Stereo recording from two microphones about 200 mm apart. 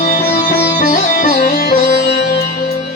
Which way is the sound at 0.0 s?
40° left (ahead or behind).